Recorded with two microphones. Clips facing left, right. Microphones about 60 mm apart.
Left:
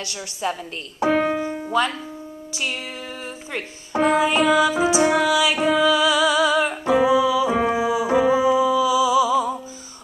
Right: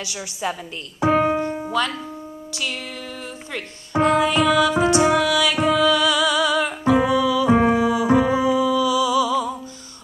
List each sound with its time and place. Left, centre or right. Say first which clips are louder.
0.0 s a woman's voice: even; centre
1.0 s piano: right 2 dB; centre
1.7 s speech: left 4 dB; centre
3.5 s music: right 1 dB; centre